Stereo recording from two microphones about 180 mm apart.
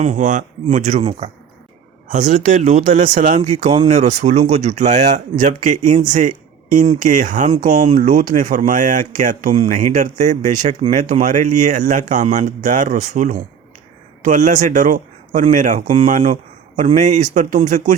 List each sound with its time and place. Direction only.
0.0 s speech: 45° right (ahead or behind)